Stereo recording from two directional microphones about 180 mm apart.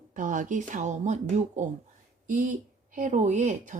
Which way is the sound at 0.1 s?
45° right (ahead or behind).